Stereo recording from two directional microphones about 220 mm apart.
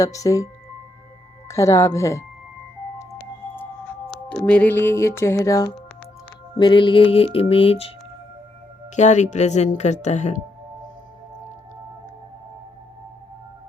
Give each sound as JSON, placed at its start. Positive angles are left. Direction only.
{"t": 0.0, "sound": "music", "side_deg": 15}
{"t": 9.0, "sound": "speech", "side_deg": 35}